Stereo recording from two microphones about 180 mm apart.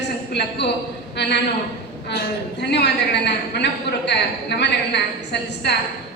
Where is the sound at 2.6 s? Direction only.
70° left (ahead or behind).